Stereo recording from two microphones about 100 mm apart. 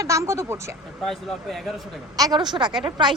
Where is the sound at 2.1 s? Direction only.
40° right (ahead or behind).